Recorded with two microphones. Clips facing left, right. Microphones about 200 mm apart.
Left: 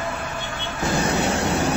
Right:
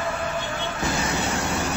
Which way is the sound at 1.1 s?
70° left (ahead or behind).